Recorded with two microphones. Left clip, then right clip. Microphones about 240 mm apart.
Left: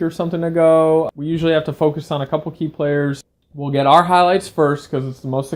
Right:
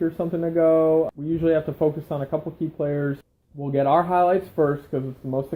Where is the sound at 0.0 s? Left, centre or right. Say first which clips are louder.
Left 4 dB; left.